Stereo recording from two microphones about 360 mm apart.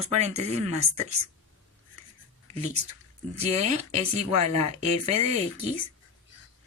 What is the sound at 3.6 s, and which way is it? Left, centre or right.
Speech, centre.